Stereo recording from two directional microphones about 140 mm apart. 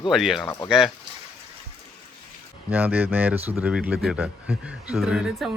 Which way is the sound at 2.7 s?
15° right (ahead or behind).